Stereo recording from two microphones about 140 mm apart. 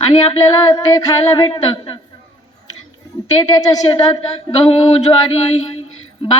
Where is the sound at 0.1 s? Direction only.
30° left (ahead or behind).